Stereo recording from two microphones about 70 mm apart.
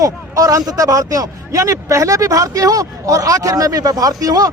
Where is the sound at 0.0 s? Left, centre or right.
Right.